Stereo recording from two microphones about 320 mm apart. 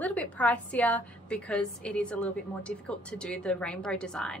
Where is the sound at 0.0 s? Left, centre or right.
Centre.